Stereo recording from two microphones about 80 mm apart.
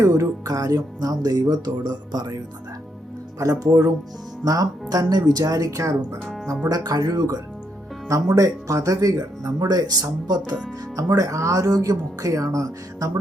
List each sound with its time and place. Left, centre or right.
0.0 s speech: right
3.3 s speech: right
6.2 s music: centre
6.7 s speech: right
8.4 s speech: right
10.9 s speech: right